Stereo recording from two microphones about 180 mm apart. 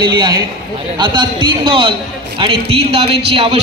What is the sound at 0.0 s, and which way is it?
A man's voice, 25° right (ahead or behind).